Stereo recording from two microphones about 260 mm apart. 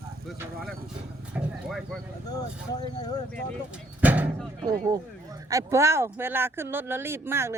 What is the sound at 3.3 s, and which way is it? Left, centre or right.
Speech, centre.